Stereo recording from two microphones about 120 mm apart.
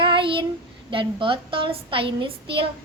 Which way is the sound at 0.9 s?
45° right (ahead or behind).